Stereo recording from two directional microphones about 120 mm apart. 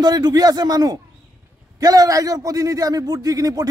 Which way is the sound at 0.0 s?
35° right (ahead or behind).